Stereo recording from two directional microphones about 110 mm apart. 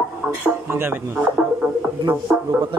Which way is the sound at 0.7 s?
20° right (ahead or behind).